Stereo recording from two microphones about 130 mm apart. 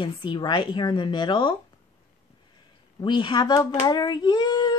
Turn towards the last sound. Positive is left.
turn(degrees=35)  # may be behind; listen again after turning